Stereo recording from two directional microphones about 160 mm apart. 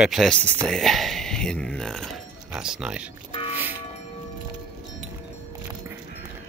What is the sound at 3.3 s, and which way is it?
Music, 35° left (ahead or behind).